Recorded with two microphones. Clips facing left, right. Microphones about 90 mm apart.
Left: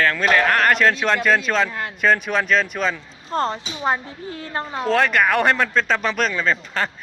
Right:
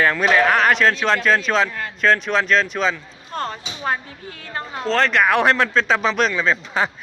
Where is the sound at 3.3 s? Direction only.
25° left (ahead or behind).